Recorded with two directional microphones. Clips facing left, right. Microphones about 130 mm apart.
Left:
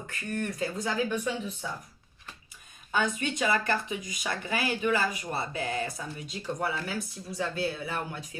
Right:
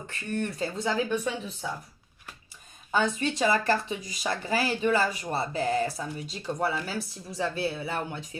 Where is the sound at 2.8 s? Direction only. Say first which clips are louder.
Right 3 dB; 30° right (ahead or behind).